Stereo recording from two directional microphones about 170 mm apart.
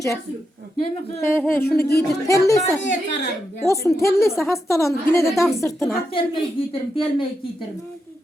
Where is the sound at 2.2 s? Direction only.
20° left (ahead or behind).